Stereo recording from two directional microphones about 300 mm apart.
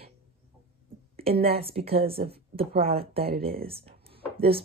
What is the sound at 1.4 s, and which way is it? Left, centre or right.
A woman's voice, centre.